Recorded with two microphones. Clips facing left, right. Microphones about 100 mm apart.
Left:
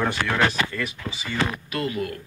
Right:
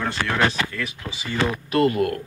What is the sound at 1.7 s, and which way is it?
Speech, 45° right (ahead or behind).